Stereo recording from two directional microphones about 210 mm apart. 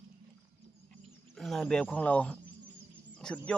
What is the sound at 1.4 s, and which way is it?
Speech, centre (ahead or behind).